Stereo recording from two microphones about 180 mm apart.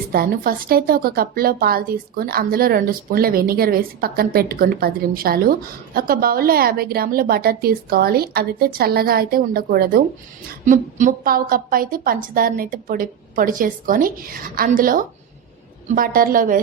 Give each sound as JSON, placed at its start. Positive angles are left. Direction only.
{"t": 0.1, "sound": "a woman's voice", "side_deg": -55}
{"t": 10.7, "sound": "a woman's voice", "side_deg": -45}